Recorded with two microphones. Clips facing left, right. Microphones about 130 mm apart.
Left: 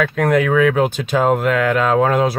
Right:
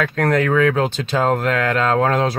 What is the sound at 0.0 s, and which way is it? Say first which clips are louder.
Speech: left 2 dB; 10° left (ahead or behind).